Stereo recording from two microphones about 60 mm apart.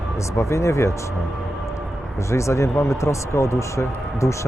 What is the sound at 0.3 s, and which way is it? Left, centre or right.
Speech, left.